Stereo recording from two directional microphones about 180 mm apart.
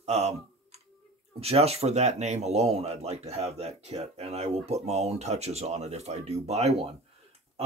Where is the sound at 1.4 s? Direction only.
35° right (ahead or behind).